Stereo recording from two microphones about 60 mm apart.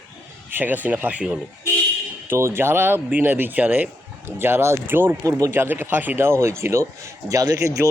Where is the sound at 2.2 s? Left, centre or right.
Right.